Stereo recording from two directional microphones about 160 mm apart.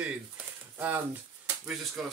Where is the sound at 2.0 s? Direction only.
Centre (ahead or behind).